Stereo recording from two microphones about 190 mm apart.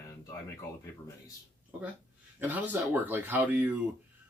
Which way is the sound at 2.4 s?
10° right (ahead or behind).